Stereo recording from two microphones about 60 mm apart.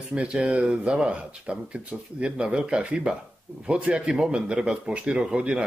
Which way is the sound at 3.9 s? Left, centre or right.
Centre.